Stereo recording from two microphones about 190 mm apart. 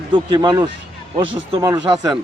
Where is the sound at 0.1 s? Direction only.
20° right (ahead or behind).